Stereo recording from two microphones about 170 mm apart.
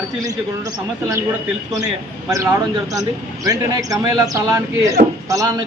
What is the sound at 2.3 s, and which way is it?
A man's voice, 20° right (ahead or behind).